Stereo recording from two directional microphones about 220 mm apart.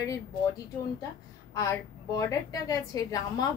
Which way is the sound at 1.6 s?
15° left (ahead or behind).